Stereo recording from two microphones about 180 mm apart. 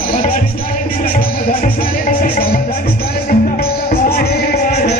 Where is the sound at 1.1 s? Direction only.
50° left (ahead or behind).